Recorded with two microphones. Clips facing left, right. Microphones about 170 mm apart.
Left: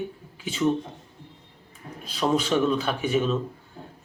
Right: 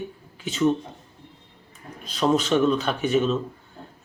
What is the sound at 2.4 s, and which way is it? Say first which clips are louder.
Speech: right 2 dB; 10° left (ahead or behind).